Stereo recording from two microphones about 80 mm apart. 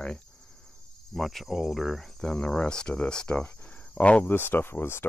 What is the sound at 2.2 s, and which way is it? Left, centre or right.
Speech, centre.